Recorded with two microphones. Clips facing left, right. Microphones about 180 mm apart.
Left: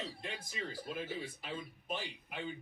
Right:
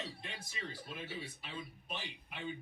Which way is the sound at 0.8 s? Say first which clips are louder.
Left 4 dB; 45° left (ahead or behind).